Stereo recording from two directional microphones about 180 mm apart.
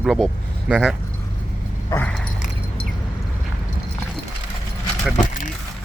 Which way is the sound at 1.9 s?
10° left (ahead or behind).